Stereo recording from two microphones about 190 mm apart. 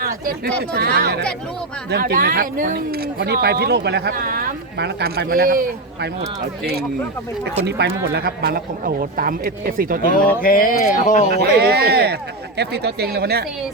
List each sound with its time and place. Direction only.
0.7 s speech: 60° right (ahead or behind)
7.6 s speech: 65° right (ahead or behind)
10.2 s speech: 50° left (ahead or behind)
11.3 s speech: 55° right (ahead or behind)